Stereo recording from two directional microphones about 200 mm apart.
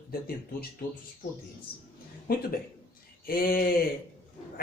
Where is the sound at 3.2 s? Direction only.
45° left (ahead or behind).